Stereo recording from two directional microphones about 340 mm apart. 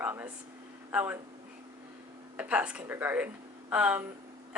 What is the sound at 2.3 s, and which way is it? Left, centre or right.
Speech, centre.